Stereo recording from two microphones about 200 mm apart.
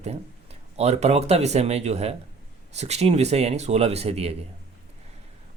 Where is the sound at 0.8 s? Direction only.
35° right (ahead or behind).